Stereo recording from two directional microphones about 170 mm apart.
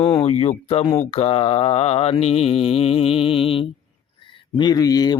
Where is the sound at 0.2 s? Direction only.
35° left (ahead or behind).